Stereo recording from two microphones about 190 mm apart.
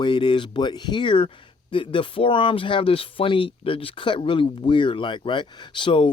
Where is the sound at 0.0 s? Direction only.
25° left (ahead or behind).